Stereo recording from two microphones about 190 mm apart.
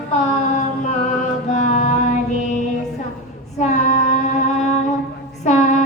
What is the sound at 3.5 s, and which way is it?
Child singing, 40° left (ahead or behind).